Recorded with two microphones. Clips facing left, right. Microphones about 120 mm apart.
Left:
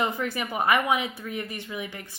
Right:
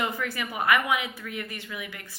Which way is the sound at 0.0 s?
25° left (ahead or behind).